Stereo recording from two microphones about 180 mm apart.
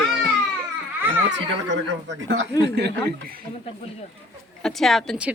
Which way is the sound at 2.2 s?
90° right.